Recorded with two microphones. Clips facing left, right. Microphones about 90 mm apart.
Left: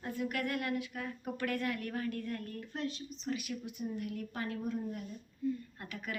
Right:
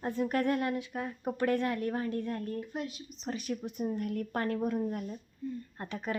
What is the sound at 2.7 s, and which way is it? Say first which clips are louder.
Speech: right 1 dB; 10° right (ahead or behind).